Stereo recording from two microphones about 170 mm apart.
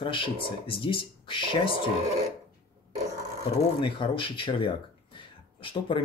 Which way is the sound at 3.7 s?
30° left (ahead or behind).